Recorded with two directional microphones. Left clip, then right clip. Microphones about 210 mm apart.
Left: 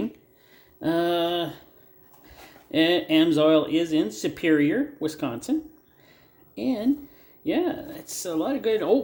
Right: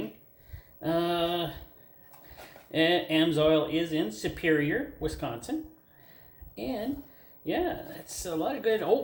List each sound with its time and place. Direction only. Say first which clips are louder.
0.8 s speech: left 4 dB; 50° left (ahead or behind)
6.6 s speech: left 8 dB; 50° left (ahead or behind)